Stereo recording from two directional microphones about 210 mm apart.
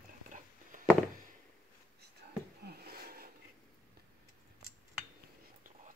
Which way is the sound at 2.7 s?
45° right (ahead or behind).